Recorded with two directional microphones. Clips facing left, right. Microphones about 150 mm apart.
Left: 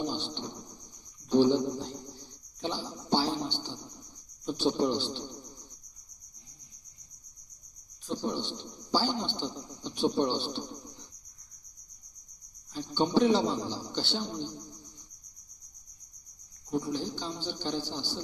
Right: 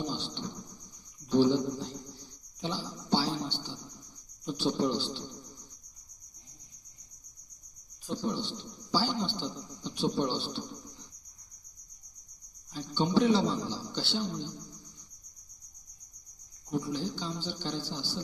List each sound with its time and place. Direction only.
0.1 s bird: 20° left (ahead or behind)
1.3 s a sound: 20° left (ahead or behind)
8.1 s a man's voice: 20° left (ahead or behind)
12.9 s a man's voice: 20° left (ahead or behind)
16.7 s a man's voice: 20° left (ahead or behind)